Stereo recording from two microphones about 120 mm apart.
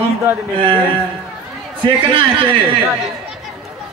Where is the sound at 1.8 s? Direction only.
45° right (ahead or behind).